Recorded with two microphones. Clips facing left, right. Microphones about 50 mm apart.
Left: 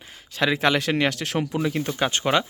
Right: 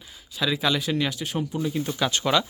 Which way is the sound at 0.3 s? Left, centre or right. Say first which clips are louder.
Left 4 dB; left.